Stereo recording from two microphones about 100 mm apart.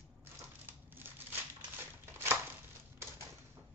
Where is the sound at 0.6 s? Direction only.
20° right (ahead or behind).